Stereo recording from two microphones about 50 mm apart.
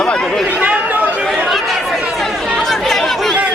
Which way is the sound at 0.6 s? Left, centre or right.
Right.